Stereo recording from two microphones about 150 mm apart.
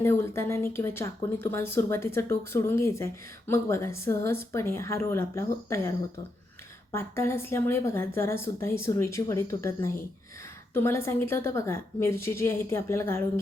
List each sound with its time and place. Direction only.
0.0 s speech: 15° left (ahead or behind)
6.9 s speech: 15° left (ahead or behind)